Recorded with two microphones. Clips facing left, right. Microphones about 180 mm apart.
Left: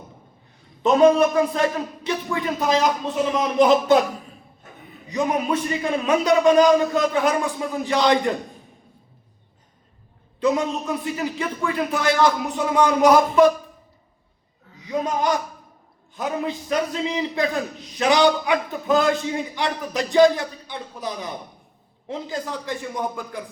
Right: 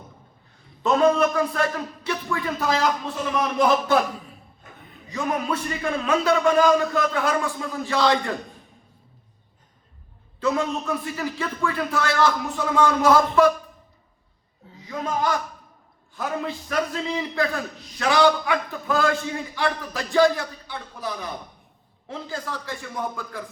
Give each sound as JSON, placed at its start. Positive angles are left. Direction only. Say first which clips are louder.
{"t": 0.8, "sound": "a man's voice", "louder": "left 4 dB", "side_deg": 20}
{"t": 5.0, "sound": "a man's voice", "louder": "left 3 dB", "side_deg": 20}
{"t": 10.4, "sound": "a man's voice", "louder": "left 2 dB", "side_deg": 15}
{"t": 14.8, "sound": "a man's voice", "louder": "left 3 dB", "side_deg": 20}